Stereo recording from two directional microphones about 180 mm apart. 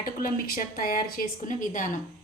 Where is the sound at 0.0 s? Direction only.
50° left (ahead or behind).